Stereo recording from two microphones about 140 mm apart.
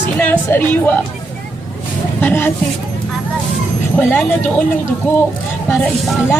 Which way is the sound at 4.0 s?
15° left (ahead or behind).